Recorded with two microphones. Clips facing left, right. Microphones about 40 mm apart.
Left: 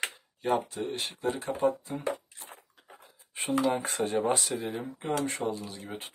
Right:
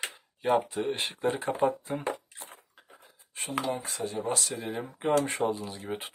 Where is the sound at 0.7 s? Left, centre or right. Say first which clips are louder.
Right 3 dB; right.